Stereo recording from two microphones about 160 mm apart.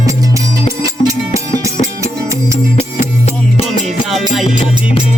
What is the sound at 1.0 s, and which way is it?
Music, 20° right (ahead or behind).